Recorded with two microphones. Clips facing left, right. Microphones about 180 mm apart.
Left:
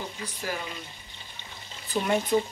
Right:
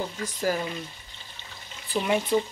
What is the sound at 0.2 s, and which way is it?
Speech, 40° right (ahead or behind).